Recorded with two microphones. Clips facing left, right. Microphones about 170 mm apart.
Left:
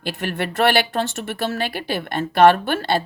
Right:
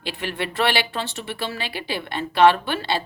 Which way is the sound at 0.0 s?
50° left (ahead or behind).